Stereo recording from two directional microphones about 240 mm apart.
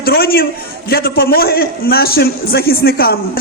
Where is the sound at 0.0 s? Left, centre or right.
Left.